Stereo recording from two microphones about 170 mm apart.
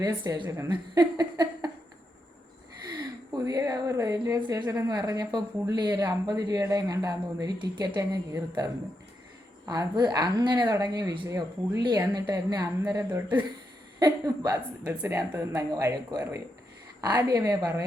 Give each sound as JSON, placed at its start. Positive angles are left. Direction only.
{"t": 0.0, "sound": "speech", "side_deg": -25}
{"t": 2.9, "sound": "a woman's voice", "side_deg": -25}